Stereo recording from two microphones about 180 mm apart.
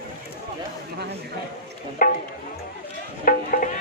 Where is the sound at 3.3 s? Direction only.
50° left (ahead or behind).